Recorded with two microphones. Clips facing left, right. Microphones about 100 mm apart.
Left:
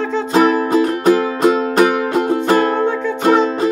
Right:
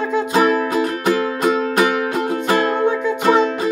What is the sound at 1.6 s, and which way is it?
Music, 35° left (ahead or behind).